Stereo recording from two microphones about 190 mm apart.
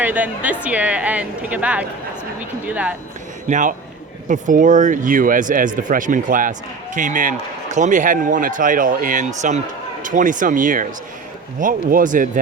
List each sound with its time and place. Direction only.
0.0 s a woman's voice: 10° right (ahead or behind)
3.5 s a man's voice: 40° right (ahead or behind)